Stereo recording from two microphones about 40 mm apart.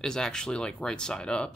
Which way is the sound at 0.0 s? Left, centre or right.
Centre.